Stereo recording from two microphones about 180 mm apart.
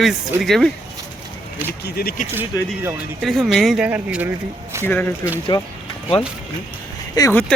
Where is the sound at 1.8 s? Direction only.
60° left (ahead or behind).